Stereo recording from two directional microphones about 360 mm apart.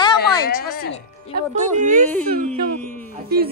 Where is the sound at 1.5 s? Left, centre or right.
Right.